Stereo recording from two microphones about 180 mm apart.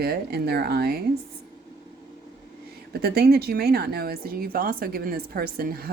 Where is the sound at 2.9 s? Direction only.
60° right (ahead or behind).